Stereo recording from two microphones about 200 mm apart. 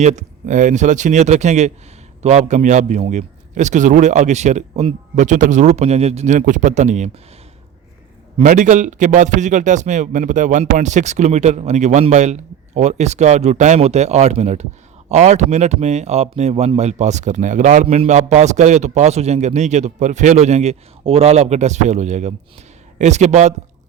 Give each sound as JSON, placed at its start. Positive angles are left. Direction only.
{"t": 0.0, "sound": "speech", "side_deg": -35}
{"t": 8.4, "sound": "speech", "side_deg": -40}